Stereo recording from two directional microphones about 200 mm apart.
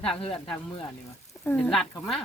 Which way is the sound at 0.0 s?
5° left (ahead or behind).